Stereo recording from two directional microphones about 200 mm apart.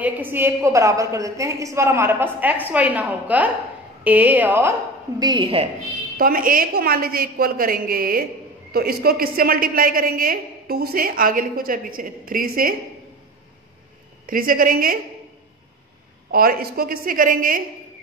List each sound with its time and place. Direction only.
0.0 s a woman's voice: 10° right (ahead or behind)
5.2 s a woman's voice: 25° right (ahead or behind)
6.1 s a woman's voice: 45° right (ahead or behind)
14.2 s a woman's voice: 45° right (ahead or behind)
16.3 s a woman's voice: 50° right (ahead or behind)